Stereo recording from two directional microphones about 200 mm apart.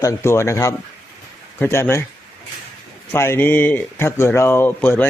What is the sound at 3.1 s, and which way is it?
Speech, 10° left (ahead or behind).